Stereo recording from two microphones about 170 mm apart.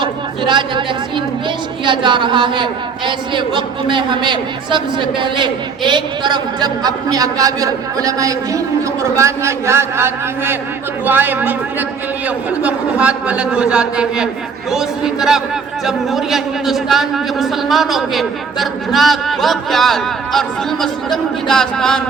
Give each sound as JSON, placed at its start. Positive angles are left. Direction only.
{"t": 0.0, "sound": "chatter", "side_deg": -30}
{"t": 1.8, "sound": "a man's voice", "side_deg": -30}